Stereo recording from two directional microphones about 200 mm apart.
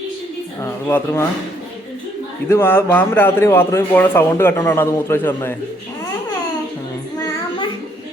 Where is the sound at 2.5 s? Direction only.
10° left (ahead or behind).